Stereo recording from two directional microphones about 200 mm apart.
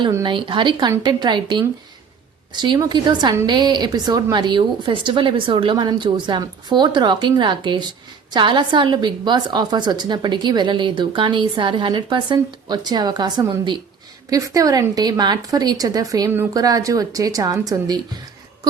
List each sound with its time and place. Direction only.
0.0 s a woman's voice: 20° right (ahead or behind)